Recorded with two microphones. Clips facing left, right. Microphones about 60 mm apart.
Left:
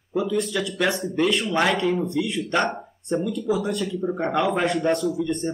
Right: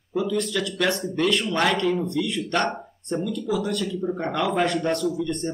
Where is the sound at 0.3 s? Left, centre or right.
Centre.